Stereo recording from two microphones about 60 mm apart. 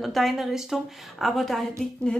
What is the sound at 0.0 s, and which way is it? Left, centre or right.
A woman's voice, centre.